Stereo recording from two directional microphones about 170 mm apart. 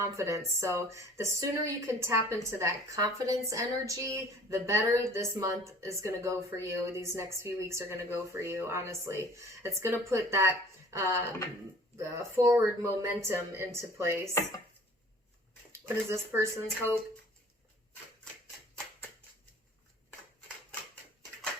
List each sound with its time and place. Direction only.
0.0 s speech: 15° right (ahead or behind)
16.1 s speech: 15° right (ahead or behind)